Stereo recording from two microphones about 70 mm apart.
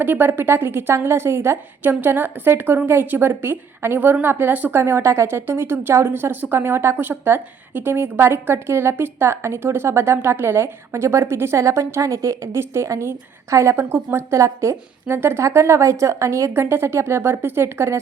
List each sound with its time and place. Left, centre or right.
0.0 s a woman's voice: right
4.7 s a woman's voice: right
15.0 s a woman's voice: right